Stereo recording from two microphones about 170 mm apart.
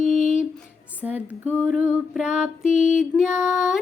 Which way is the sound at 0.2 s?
45° left (ahead or behind).